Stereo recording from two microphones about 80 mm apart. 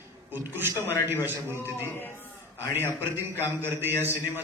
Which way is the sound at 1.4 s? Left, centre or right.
Right.